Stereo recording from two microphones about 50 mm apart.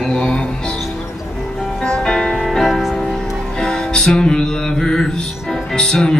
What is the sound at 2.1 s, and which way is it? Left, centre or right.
Music, centre.